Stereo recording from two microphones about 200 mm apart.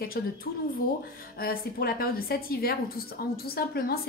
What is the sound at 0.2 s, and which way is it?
Speech, 50° left (ahead or behind).